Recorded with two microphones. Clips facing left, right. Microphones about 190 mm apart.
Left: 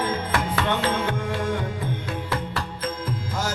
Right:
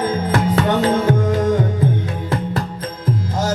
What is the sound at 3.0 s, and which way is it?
Music, 40° right (ahead or behind).